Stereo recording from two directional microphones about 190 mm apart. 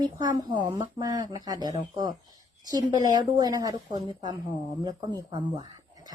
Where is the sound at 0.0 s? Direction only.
20° right (ahead or behind).